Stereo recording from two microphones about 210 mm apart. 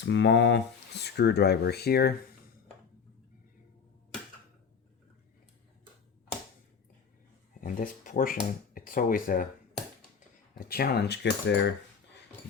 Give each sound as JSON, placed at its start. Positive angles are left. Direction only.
{"t": 0.0, "sound": "speech", "side_deg": 55}
{"t": 7.6, "sound": "speech", "side_deg": 40}
{"t": 10.6, "sound": "speech", "side_deg": 45}